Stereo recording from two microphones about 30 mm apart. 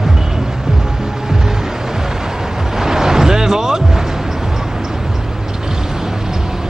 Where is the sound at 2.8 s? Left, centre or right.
Centre.